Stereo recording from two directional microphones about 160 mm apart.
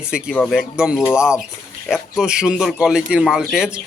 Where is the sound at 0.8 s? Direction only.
5° right (ahead or behind).